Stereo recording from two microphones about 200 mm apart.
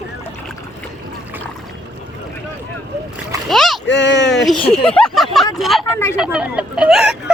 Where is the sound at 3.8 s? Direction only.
65° left (ahead or behind).